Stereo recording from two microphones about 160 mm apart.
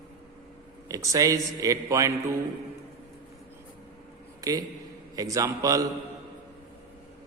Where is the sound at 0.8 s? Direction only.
20° right (ahead or behind).